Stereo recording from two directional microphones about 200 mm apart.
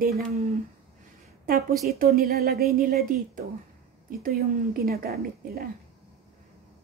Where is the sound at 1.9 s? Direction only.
50° right (ahead or behind).